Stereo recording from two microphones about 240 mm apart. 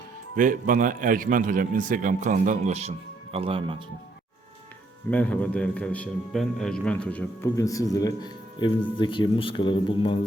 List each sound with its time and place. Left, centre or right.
0.3 s a man's voice: right
5.1 s a man's voice: centre; by 10.2 s left